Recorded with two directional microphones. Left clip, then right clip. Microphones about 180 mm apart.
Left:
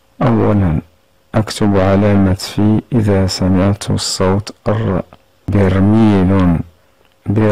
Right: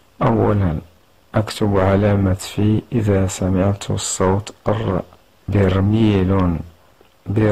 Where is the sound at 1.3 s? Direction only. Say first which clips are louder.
Left 4 dB; 40° left (ahead or behind).